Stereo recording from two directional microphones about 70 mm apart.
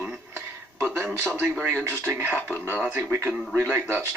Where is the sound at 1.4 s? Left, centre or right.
Right.